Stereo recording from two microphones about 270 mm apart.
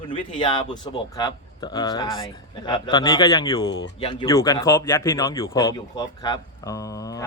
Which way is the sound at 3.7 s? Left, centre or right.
Left.